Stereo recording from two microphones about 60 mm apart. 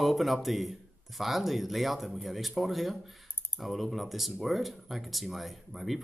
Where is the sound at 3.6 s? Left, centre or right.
Centre.